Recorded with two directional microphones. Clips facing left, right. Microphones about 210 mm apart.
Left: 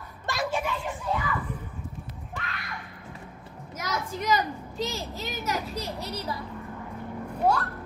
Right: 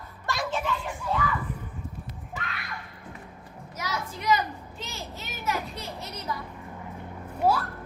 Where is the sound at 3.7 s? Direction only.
45° left (ahead or behind).